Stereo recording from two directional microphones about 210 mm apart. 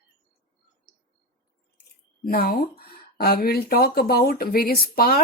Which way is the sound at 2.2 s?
45° left (ahead or behind).